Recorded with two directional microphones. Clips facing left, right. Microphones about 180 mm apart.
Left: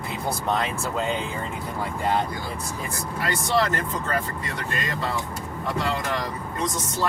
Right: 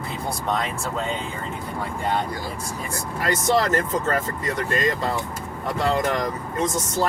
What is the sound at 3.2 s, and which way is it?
Speech, 40° right (ahead or behind).